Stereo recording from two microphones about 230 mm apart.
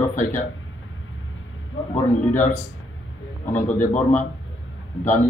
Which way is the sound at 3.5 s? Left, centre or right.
Left.